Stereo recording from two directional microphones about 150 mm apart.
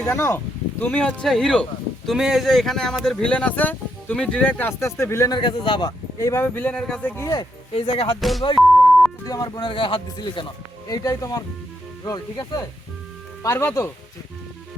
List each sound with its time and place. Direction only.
0.0 s speech: 15° left (ahead or behind); by 5.9 s 35° left (ahead or behind)
6.1 s speech: 20° left (ahead or behind)
7.2 s speech: 20° left (ahead or behind)
7.7 s speech: 40° left (ahead or behind)
8.2 s music: centre (ahead or behind)
8.5 s beep: centre (ahead or behind)
9.2 s speech: 25° left (ahead or behind)